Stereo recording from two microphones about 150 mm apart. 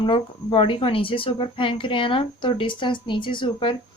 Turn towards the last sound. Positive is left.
turn(degrees=35)  # may be behind; listen again after turning